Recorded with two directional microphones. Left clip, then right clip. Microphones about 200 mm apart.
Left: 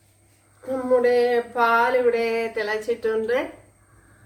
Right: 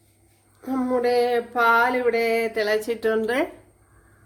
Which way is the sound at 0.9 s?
45° right (ahead or behind).